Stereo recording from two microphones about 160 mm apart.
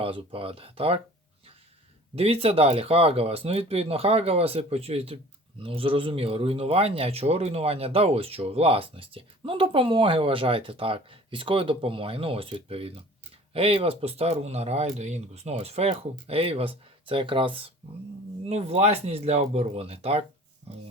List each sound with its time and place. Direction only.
0.0 s speech: 35° right (ahead or behind)
2.1 s speech: 40° right (ahead or behind)